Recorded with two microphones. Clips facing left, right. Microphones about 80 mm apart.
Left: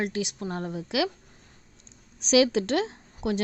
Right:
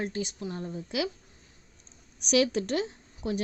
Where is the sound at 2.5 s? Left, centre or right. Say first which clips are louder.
Left 4 dB; left.